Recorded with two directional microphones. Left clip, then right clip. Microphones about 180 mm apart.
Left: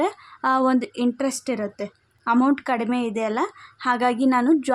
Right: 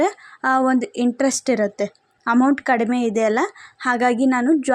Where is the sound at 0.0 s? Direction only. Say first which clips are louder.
Right 3 dB; 15° right (ahead or behind).